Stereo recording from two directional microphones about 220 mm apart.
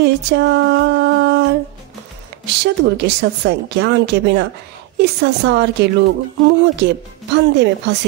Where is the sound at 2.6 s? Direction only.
50° right (ahead or behind).